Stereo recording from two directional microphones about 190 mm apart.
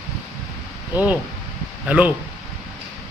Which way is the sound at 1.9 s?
10° right (ahead or behind).